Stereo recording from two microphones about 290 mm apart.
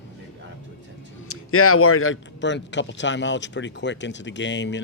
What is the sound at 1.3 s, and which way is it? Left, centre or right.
Speech, left.